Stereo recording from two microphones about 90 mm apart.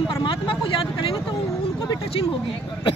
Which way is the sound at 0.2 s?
70° left (ahead or behind).